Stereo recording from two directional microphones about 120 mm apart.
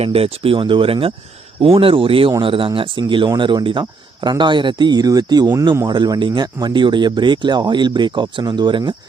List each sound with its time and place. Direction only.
0.0 s speech: 50° right (ahead or behind)